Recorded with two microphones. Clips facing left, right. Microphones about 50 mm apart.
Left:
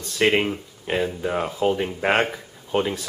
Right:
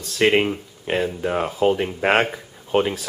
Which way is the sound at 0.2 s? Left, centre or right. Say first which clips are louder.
Right 2 dB; centre.